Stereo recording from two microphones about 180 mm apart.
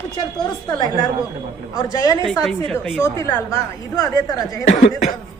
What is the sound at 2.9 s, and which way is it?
A woman's voice, 15° left (ahead or behind).